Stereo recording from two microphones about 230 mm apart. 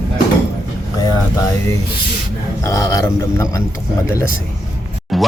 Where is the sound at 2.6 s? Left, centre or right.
Centre.